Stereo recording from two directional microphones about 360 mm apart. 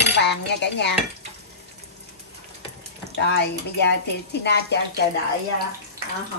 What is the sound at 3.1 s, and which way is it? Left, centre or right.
Stir, left.